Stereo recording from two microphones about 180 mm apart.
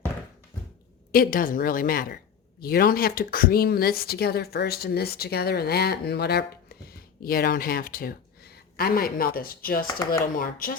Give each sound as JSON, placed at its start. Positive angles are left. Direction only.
{"t": 1.1, "sound": "a woman's voice", "side_deg": 55}